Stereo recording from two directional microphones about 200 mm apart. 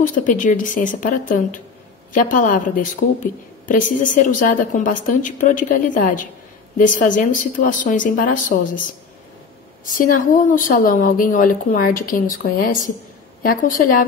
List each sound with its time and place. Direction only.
0.0 s a woman's voice: 40° left (ahead or behind)
9.8 s a woman's voice: 45° left (ahead or behind)